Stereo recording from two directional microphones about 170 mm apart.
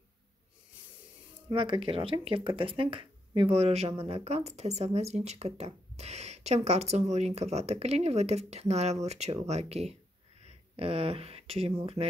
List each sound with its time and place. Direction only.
1.5 s speech: 30° right (ahead or behind)